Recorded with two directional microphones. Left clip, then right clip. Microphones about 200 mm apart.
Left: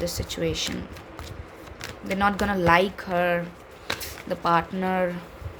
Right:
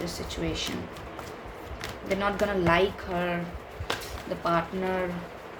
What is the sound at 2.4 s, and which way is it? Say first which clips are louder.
Speech: left 3 dB; 55° left (ahead or behind).